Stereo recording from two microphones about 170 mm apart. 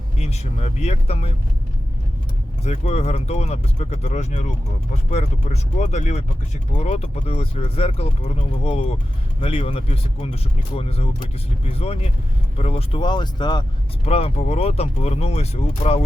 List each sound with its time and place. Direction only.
0.2 s speech: 40° left (ahead or behind)
2.6 s speech: 40° left (ahead or behind)
14.0 s speech: 40° left (ahead or behind)